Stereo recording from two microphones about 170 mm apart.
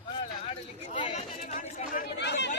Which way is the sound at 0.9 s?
30° left (ahead or behind).